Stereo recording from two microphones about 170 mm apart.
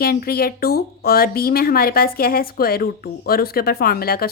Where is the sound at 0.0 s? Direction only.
60° left (ahead or behind).